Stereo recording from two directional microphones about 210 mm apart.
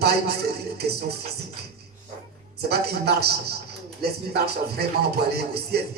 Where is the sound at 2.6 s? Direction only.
50° right (ahead or behind).